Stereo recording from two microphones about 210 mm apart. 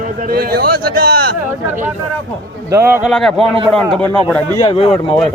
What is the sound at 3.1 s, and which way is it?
A man's voice, centre (ahead or behind).